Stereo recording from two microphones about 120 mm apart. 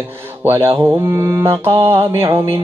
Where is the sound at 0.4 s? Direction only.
20° right (ahead or behind).